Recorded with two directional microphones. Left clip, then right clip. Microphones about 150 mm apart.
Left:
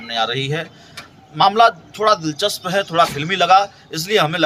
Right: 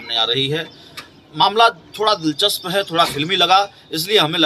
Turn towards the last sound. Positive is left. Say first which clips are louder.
# right 1 dB
turn(degrees=10)  # may be behind; listen again after turning